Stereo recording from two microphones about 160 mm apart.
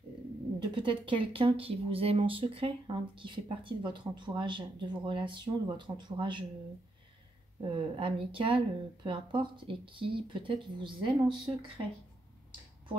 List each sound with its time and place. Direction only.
0.7 s speech: 30° right (ahead or behind)
7.6 s speech: 30° right (ahead or behind)